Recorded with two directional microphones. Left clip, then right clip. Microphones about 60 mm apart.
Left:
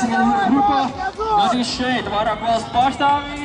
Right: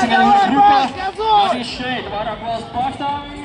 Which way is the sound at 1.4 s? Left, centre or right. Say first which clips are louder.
Right 2 dB; centre.